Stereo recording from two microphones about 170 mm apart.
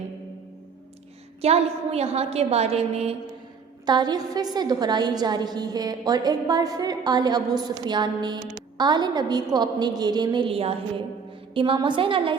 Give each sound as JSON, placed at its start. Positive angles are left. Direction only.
{"t": 1.4, "sound": "a woman's voice", "side_deg": -35}
{"t": 3.8, "sound": "a woman's voice", "side_deg": -25}